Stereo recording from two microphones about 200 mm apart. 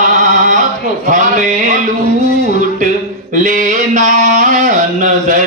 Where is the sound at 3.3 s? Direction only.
40° right (ahead or behind).